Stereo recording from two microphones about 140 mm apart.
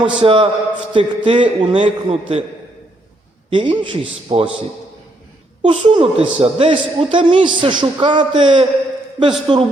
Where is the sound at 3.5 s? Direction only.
35° right (ahead or behind).